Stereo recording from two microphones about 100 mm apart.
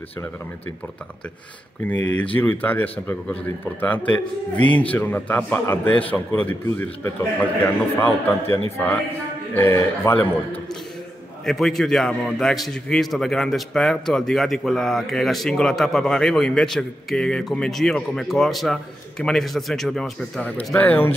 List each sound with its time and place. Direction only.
1.9 s a man's voice: 15° left (ahead or behind)
10.1 s a man's voice: 10° left (ahead or behind)
20.4 s a man's voice: 15° left (ahead or behind)